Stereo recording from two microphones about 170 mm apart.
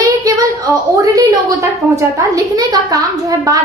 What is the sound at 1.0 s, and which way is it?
A woman's voice, 20° right (ahead or behind).